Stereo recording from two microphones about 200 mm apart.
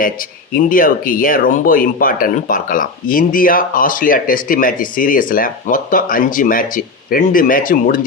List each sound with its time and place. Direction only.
0.5 s speech: 45° left (ahead or behind)